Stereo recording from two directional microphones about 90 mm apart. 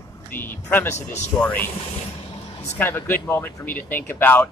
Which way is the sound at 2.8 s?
25° left (ahead or behind).